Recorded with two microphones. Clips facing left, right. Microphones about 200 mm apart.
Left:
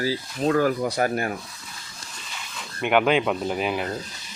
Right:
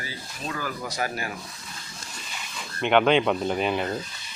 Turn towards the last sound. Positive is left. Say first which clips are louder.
# even
turn(degrees=5)  # may be behind; listen again after turning